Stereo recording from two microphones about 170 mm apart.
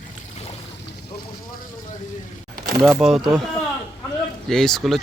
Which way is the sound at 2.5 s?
60° right (ahead or behind).